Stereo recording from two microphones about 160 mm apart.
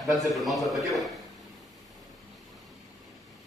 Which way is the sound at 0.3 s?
Centre (ahead or behind).